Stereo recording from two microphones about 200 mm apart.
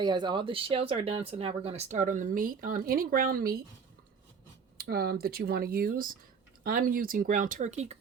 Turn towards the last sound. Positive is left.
turn(degrees=-35)  # may be behind; listen again after turning